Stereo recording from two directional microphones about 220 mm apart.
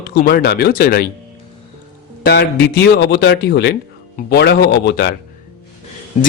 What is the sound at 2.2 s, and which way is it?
A man's voice, 45° left (ahead or behind).